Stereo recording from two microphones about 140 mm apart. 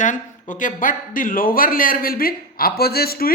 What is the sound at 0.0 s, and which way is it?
Speech, 65° left (ahead or behind).